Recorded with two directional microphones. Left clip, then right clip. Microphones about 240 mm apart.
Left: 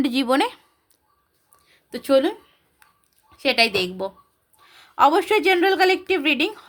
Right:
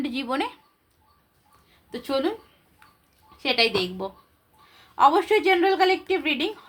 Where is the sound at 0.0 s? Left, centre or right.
Left.